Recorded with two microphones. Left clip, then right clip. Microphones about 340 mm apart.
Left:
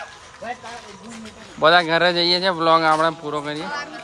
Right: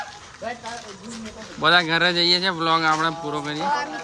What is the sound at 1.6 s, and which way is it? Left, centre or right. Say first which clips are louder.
Speech: left 3 dB; centre.